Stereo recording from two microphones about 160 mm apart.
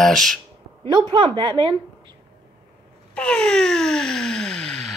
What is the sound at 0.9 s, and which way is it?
A woman's voice, 30° right (ahead or behind).